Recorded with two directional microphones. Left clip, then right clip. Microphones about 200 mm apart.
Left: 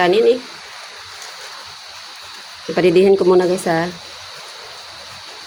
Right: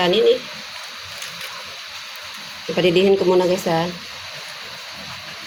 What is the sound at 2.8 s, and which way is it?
Speech, 20° left (ahead or behind).